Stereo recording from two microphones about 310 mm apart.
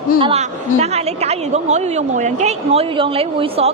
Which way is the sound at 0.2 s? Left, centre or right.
Centre.